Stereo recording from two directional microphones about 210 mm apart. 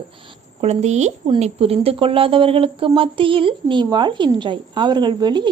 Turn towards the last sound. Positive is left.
turn(degrees=-20)  # may be behind; listen again after turning